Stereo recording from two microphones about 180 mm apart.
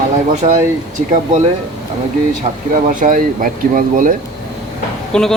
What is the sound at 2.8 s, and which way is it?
Speech, 50° right (ahead or behind).